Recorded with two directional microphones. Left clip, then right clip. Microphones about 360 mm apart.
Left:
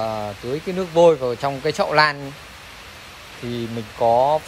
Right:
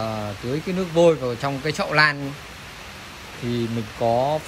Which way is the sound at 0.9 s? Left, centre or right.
Centre.